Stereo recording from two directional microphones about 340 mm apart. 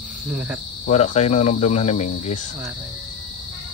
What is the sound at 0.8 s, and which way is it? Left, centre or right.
Speech, centre.